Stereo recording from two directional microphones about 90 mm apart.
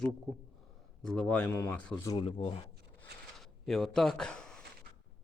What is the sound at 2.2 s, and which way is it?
Speech, 90° left.